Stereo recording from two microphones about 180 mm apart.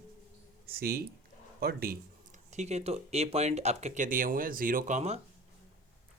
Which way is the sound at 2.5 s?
40° right (ahead or behind).